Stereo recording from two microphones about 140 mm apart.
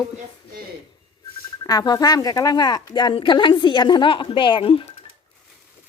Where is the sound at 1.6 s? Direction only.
30° left (ahead or behind).